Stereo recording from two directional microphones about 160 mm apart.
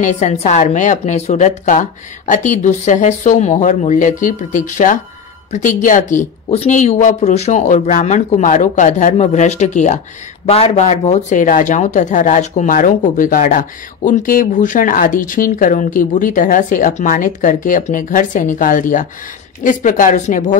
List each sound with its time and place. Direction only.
0.0 s a woman's voice: 45° left (ahead or behind)